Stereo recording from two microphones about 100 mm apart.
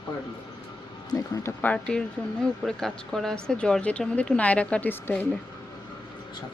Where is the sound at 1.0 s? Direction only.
35° left (ahead or behind).